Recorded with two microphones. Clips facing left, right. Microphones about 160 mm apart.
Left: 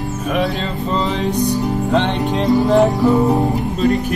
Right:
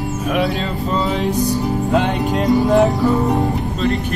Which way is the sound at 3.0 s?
10° left (ahead or behind).